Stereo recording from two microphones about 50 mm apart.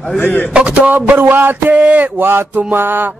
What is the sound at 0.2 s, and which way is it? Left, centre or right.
Speech, left.